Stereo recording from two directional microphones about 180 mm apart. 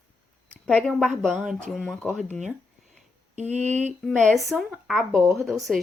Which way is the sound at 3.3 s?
40° right (ahead or behind).